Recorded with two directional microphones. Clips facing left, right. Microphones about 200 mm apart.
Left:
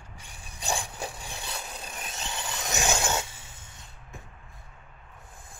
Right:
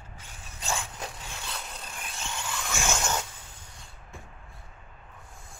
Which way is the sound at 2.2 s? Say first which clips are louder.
Even; 35° left (ahead or behind).